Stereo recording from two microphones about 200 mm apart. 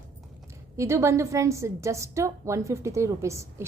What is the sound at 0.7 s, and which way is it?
A woman's voice, 15° right (ahead or behind).